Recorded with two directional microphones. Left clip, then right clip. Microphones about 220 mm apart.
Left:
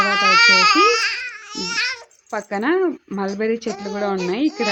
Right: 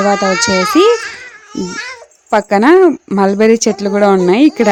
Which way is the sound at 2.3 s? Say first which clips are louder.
Right 12 dB; 45° right (ahead or behind).